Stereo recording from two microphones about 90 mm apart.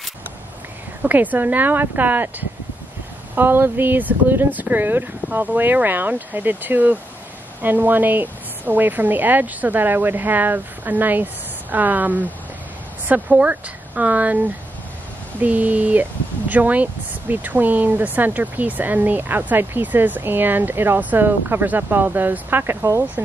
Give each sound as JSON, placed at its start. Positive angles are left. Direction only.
{"t": 1.0, "sound": "speech", "side_deg": -20}
{"t": 3.3, "sound": "speech", "side_deg": -20}